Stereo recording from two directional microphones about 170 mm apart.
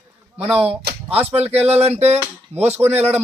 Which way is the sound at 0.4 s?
5° right (ahead or behind).